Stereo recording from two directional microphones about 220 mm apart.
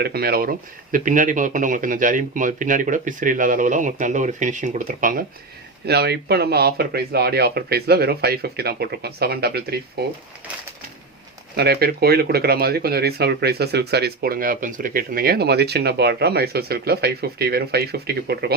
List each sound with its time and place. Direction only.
0.0 s speech: 45° right (ahead or behind)
11.5 s speech: 45° right (ahead or behind)